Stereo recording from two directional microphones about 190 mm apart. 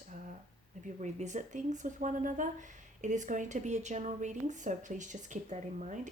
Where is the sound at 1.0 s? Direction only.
40° right (ahead or behind).